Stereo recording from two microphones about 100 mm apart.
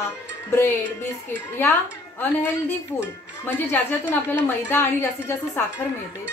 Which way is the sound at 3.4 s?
20° left (ahead or behind).